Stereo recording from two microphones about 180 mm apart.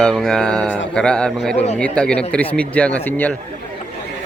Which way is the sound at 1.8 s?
5° left (ahead or behind).